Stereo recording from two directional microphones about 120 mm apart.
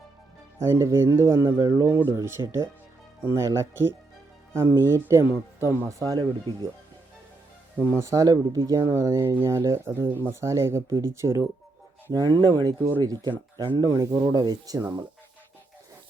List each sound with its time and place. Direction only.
0.6 s speech: 20° right (ahead or behind)
7.9 s speech: 20° right (ahead or behind)
12.1 s speech: 35° right (ahead or behind)